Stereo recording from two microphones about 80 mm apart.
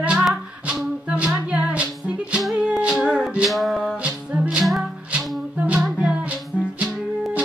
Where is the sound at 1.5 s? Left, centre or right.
Centre.